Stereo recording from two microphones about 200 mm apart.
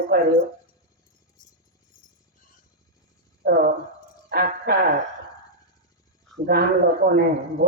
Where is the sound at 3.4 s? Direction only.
45° right (ahead or behind).